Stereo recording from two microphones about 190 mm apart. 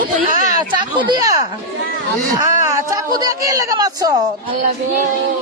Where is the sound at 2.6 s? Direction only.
15° right (ahead or behind).